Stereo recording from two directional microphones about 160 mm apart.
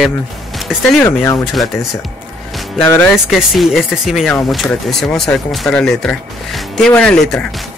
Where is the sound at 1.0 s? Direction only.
15° left (ahead or behind).